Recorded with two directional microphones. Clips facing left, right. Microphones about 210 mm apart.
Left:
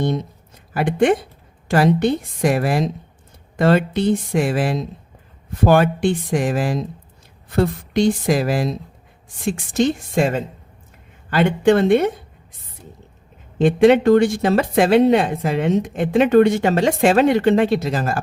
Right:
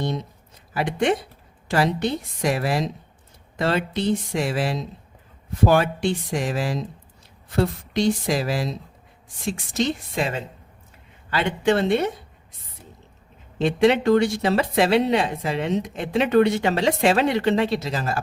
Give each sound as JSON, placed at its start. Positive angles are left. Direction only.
{"t": 0.7, "sound": "a woman's voice", "side_deg": 50}
{"t": 13.6, "sound": "a woman's voice", "side_deg": 50}